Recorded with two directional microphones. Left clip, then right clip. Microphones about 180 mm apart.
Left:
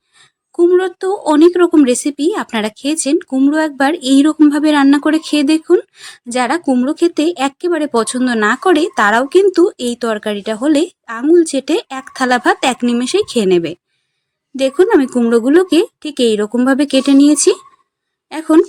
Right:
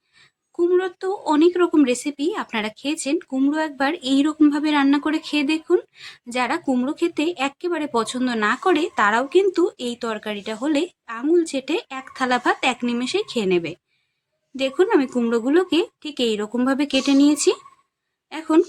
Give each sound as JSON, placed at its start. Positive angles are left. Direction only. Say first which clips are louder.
{"t": 0.2, "sound": "speech", "louder": "left 9 dB", "side_deg": 35}